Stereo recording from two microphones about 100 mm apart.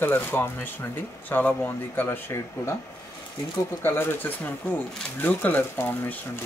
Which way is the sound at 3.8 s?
25° left (ahead or behind).